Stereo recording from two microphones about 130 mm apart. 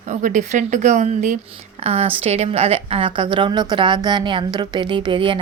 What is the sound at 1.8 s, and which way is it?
A woman's voice, 50° right (ahead or behind).